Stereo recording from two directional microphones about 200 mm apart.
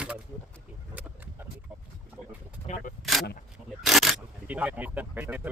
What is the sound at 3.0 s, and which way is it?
Single-lens reflex camera, centre (ahead or behind).